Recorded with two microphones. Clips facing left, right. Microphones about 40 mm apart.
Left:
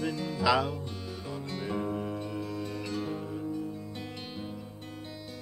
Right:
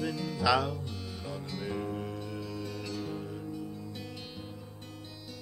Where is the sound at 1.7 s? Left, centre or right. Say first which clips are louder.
Left 3 dB; centre.